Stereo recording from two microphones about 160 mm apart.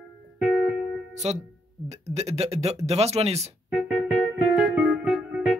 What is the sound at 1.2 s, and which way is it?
Speech, 40° right (ahead or behind).